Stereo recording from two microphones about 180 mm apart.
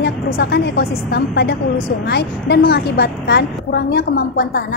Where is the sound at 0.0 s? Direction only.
70° left (ahead or behind).